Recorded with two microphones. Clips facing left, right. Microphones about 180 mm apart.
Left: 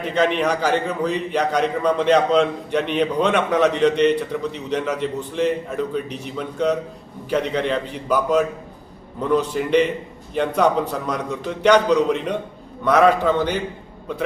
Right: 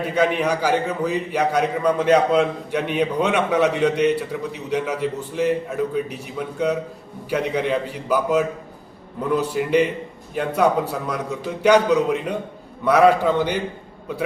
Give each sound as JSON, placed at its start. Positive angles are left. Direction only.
{"t": 0.0, "sound": "a man's voice", "side_deg": -10}